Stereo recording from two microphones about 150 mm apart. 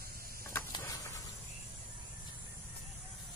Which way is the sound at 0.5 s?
20° left (ahead or behind).